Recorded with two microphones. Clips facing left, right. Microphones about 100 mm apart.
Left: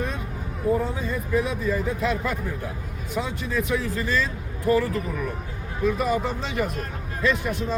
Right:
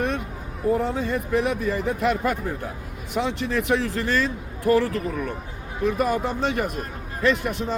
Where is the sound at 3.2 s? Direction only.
75° right (ahead or behind).